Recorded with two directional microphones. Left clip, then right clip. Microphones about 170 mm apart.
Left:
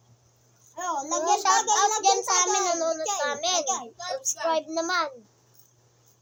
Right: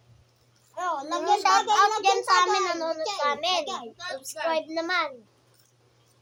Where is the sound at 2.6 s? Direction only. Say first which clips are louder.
Left 2 dB; 20° left (ahead or behind).